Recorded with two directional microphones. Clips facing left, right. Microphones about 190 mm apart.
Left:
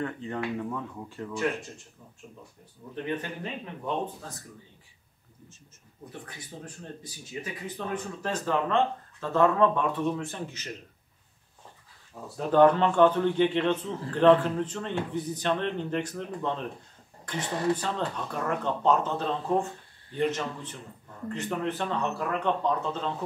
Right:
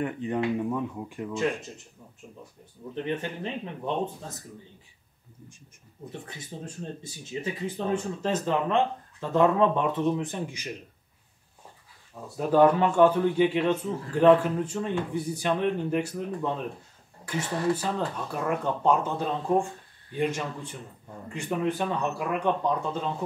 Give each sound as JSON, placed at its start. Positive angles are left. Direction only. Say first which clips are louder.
{"t": 0.0, "sound": "speech", "louder": "right 4 dB", "side_deg": -15}
{"t": 2.9, "sound": "speech", "louder": "right 2 dB", "side_deg": -25}
{"t": 6.2, "sound": "speech", "louder": "right 3 dB", "side_deg": -25}
{"t": 12.4, "sound": "speech", "louder": "even", "side_deg": -5}